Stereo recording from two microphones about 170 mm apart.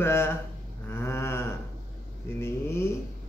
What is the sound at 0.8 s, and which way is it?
Mantra, 15° left (ahead or behind).